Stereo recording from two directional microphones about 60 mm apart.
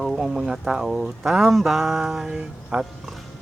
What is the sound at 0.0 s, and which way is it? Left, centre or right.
Speech, centre.